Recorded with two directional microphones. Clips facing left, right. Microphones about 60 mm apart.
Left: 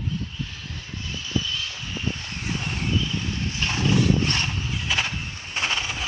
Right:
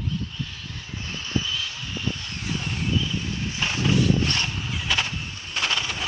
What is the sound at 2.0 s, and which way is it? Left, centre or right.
Vehicle, left.